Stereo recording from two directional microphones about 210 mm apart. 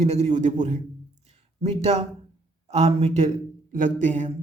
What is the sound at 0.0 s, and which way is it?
Speech, 30° right (ahead or behind).